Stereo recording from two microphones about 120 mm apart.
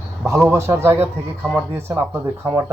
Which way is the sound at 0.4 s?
20° right (ahead or behind).